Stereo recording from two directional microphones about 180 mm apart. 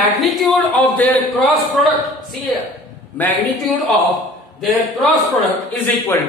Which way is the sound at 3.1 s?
10° left (ahead or behind).